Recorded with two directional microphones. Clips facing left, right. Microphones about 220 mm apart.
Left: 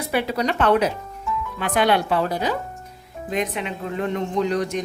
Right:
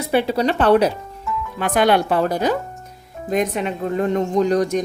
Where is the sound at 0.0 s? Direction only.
30° right (ahead or behind).